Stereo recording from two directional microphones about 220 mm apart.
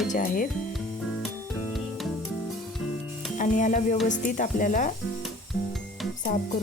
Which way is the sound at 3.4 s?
35° left (ahead or behind).